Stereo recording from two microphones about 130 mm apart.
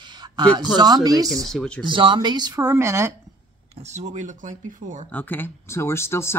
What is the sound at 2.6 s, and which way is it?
Speech, 20° right (ahead or behind).